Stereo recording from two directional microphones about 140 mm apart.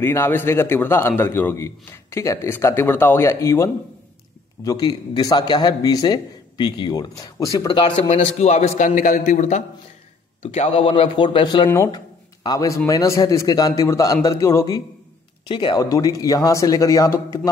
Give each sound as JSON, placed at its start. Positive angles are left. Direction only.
{"t": 0.0, "sound": "a man's voice", "side_deg": 15}
{"t": 4.6, "sound": "a man's voice", "side_deg": 30}
{"t": 7.9, "sound": "a man's voice", "side_deg": 50}
{"t": 10.4, "sound": "a man's voice", "side_deg": 45}
{"t": 15.4, "sound": "a man's voice", "side_deg": 35}